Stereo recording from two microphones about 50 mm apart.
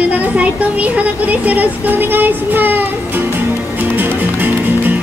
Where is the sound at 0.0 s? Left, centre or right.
Right.